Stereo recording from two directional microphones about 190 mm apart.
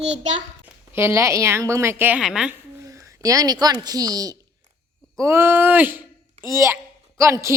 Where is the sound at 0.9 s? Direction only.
15° right (ahead or behind).